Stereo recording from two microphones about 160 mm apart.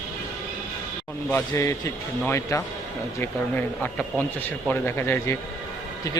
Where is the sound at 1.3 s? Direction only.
20° left (ahead or behind).